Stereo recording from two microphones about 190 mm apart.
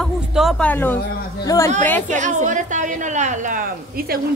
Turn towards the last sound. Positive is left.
turn(degrees=-40)  # may be behind; listen again after turning